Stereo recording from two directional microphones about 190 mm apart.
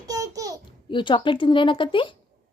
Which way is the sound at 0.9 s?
25° left (ahead or behind).